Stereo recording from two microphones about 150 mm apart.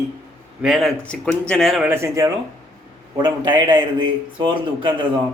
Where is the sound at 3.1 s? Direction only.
30° right (ahead or behind).